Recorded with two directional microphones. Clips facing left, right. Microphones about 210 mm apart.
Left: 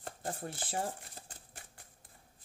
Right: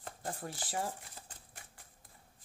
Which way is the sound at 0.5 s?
55° left (ahead or behind).